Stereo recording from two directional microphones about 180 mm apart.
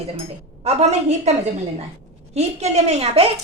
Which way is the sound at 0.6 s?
35° right (ahead or behind).